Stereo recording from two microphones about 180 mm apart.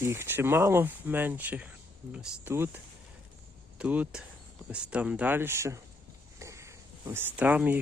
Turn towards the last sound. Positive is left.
turn(degrees=-10)  # may be behind; listen again after turning